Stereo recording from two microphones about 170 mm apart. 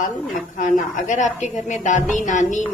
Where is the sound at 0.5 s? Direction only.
50° left (ahead or behind).